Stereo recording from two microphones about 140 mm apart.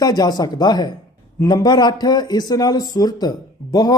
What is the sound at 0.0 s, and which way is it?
Speech, 30° left (ahead or behind).